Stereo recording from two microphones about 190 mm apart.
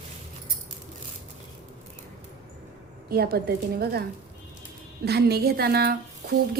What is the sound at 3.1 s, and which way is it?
A woman's voice, 55° right (ahead or behind).